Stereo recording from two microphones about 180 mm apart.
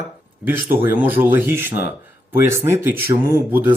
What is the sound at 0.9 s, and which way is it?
Speech, 10° right (ahead or behind).